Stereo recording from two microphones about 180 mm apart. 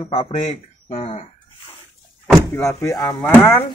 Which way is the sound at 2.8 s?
20° left (ahead or behind).